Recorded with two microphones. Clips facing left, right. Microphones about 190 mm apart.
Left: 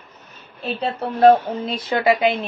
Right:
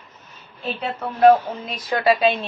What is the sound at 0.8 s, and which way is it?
Speech, 35° left (ahead or behind).